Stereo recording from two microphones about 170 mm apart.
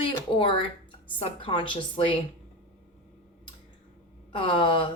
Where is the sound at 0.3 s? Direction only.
30° left (ahead or behind).